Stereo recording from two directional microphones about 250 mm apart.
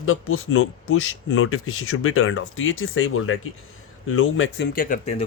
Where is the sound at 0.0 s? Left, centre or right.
Left.